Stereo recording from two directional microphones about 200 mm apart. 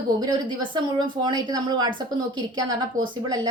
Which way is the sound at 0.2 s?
20° right (ahead or behind).